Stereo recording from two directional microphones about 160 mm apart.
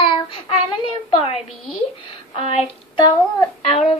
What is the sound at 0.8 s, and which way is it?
Speech, 35° left (ahead or behind).